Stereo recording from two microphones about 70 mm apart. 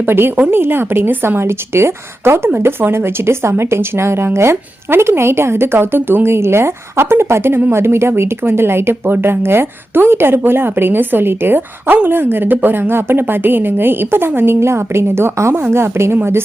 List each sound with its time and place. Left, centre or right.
0.0 s a woman's voice: right